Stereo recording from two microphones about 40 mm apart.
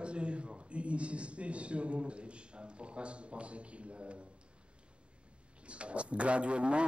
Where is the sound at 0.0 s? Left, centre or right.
Right.